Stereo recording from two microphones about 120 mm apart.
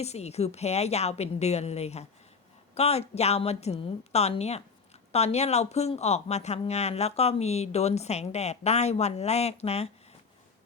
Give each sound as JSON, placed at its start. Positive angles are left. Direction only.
{"t": 0.0, "sound": "speech", "side_deg": 65}